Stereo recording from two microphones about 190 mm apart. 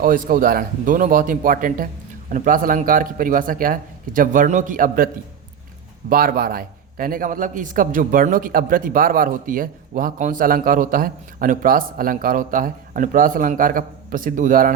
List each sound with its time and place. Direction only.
0.0 s a man's voice: 45° right (ahead or behind)
6.1 s a man's voice: 50° right (ahead or behind)